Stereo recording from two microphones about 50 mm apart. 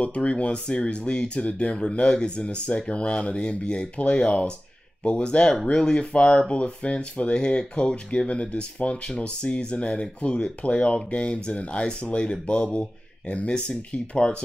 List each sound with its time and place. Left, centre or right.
0.0 s speech: left